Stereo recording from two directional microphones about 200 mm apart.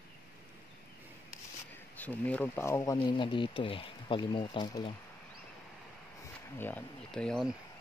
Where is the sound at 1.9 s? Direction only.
10° left (ahead or behind).